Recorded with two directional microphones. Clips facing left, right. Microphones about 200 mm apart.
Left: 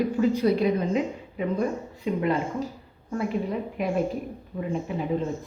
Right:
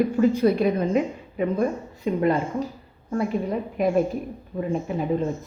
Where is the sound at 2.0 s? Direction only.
45° right (ahead or behind).